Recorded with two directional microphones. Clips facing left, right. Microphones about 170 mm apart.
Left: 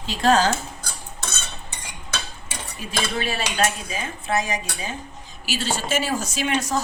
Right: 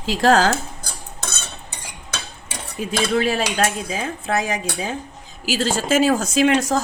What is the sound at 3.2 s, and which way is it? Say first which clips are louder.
Speech: right 4 dB; 90° right.